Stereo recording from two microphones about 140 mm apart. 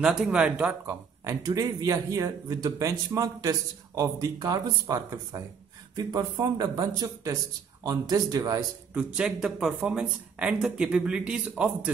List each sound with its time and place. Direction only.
0.0 s speech: 5° right (ahead or behind)
0.8 s speech: 20° right (ahead or behind)
8.9 s speech: 5° right (ahead or behind)